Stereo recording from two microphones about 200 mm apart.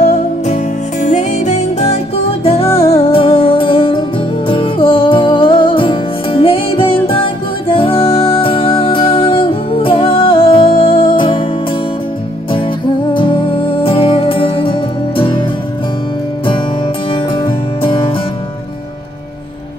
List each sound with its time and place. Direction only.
1.0 s music: 35° left (ahead or behind)
12.4 s music: 25° left (ahead or behind)
17.1 s music: 25° left (ahead or behind)